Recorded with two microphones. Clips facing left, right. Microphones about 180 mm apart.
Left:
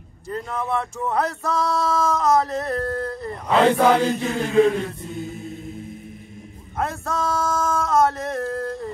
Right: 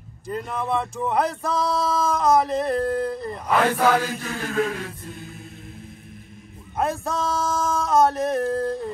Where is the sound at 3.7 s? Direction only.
5° right (ahead or behind).